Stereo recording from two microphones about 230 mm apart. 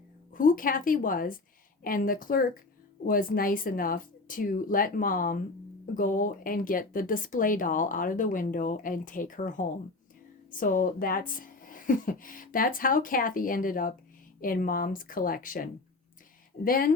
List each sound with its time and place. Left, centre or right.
0.3 s speech: left